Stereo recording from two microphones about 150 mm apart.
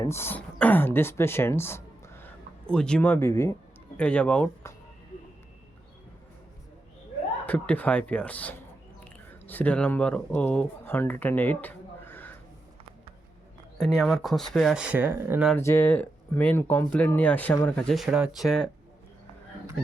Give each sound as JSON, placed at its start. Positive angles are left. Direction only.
{"t": 0.0, "sound": "speech", "side_deg": 15}
{"t": 7.4, "sound": "speech", "side_deg": 10}
{"t": 13.7, "sound": "speech", "side_deg": 0}
{"t": 15.5, "sound": "speech", "side_deg": 15}